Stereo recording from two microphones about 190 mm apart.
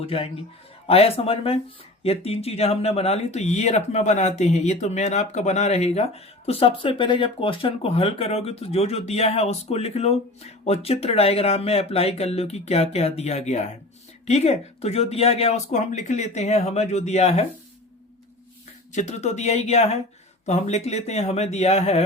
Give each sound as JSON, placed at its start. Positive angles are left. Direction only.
{"t": 0.0, "sound": "a man's voice", "side_deg": 30}
{"t": 18.9, "sound": "speech", "side_deg": 35}